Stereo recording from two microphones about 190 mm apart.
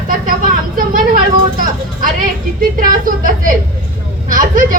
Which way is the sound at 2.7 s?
45° right (ahead or behind).